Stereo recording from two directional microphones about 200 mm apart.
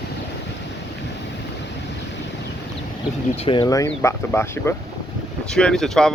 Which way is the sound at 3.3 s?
25° left (ahead or behind).